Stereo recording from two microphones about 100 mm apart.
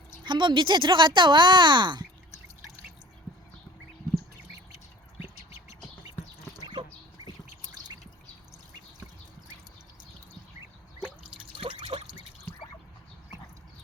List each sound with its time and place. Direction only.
0.3 s speech: 50° right (ahead or behind)
7.2 s squawk: 40° right (ahead or behind)
11.5 s trickle: 65° right (ahead or behind)